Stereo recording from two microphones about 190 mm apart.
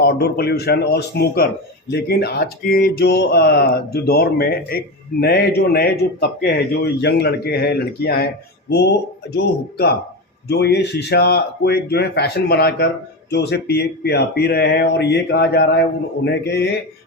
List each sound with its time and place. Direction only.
0.0 s speech: 55° left (ahead or behind)